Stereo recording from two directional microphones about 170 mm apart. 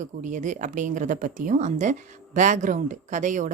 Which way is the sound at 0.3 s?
45° right (ahead or behind).